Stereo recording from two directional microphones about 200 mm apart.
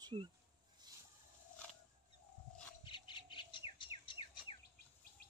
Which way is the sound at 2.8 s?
25° left (ahead or behind).